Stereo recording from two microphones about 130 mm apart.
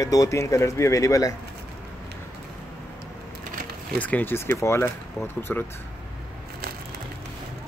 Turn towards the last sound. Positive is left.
turn(degrees=15)  # may be behind; listen again after turning